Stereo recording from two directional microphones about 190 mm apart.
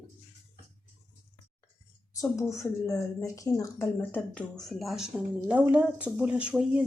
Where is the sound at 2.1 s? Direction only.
15° left (ahead or behind); by 6.8 s 5° right (ahead or behind).